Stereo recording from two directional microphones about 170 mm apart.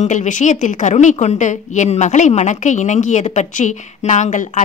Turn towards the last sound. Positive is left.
turn(degrees=45)  # may be behind; listen again after turning